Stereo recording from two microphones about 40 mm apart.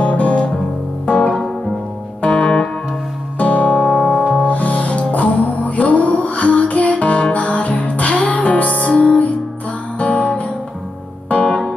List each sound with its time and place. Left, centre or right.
0.0 s music: left
1.1 s music: centre
3.3 s music: left
11.4 s music: left